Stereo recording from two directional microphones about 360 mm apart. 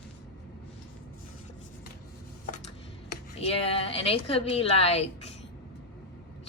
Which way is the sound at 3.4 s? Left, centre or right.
Centre.